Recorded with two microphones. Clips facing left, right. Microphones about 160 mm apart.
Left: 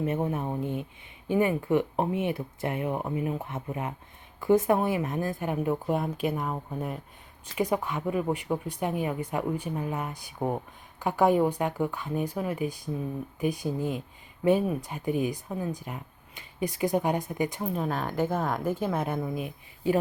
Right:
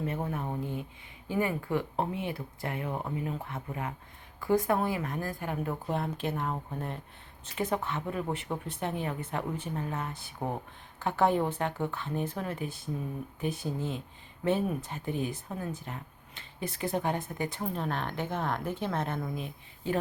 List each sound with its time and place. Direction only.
0.0 s speech: 20° left (ahead or behind)